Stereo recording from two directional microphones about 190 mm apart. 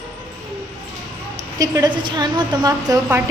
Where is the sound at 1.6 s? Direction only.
20° right (ahead or behind).